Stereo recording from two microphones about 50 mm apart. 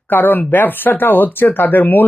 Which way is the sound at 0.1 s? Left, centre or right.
Left.